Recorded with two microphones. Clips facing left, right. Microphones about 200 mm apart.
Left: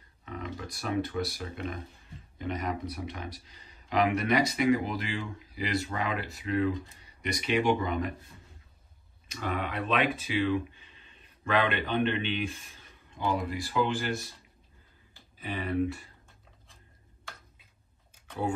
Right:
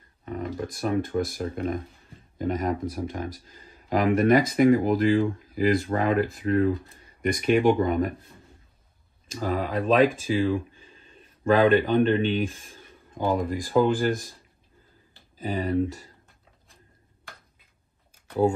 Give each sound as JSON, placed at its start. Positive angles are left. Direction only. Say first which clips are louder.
{"t": 0.2, "sound": "speech", "louder": "right 7 dB", "side_deg": -45}
{"t": 9.4, "sound": "speech", "louder": "right 6 dB", "side_deg": -35}
{"t": 15.5, "sound": "speech", "louder": "right 4 dB", "side_deg": -40}